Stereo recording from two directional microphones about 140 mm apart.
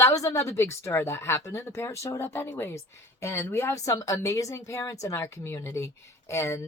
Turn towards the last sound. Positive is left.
turn(degrees=20)  # may be behind; listen again after turning